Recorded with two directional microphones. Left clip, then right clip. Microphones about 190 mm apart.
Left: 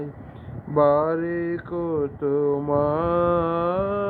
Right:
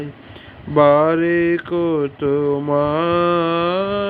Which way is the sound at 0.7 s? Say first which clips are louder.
Right 6 dB; 35° right (ahead or behind).